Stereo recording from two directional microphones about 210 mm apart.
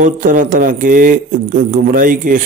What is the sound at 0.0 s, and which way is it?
Speech, 40° right (ahead or behind).